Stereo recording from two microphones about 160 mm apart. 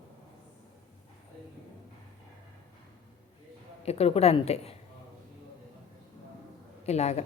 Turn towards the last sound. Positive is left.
turn(degrees=40)  # may be behind; listen again after turning